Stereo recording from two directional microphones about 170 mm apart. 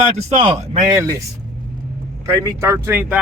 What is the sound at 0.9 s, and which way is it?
Speech, 20° right (ahead or behind).